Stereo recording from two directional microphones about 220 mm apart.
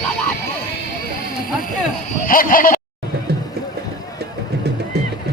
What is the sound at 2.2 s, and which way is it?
Speech, 40° left (ahead or behind).